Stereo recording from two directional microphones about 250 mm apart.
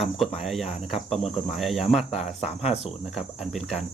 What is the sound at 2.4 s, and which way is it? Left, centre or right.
Speech, left.